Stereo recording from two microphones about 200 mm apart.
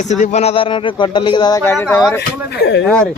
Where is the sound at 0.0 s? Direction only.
35° left (ahead or behind); by 1.7 s 20° left (ahead or behind).